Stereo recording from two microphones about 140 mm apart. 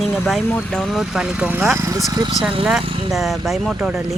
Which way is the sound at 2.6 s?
Centre (ahead or behind).